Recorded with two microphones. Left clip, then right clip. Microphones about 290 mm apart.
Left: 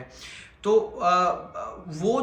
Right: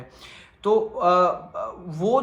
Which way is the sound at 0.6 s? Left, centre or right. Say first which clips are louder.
Right 2 dB; centre.